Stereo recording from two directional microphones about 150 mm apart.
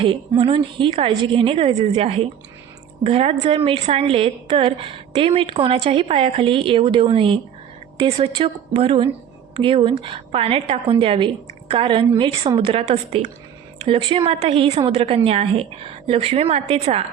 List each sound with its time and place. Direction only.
0.0 s a woman's voice: 35° right (ahead or behind)